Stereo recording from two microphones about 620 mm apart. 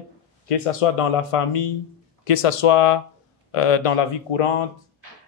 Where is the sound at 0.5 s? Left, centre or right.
Left.